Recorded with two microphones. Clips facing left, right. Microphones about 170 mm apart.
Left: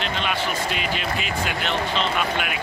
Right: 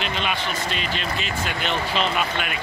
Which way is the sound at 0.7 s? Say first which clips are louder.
Left 1 dB; 5° left (ahead or behind).